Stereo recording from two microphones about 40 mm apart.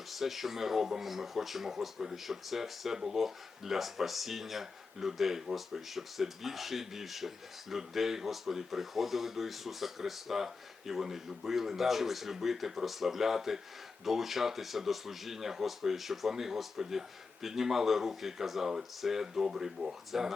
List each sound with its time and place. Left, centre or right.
0.1 s speech: centre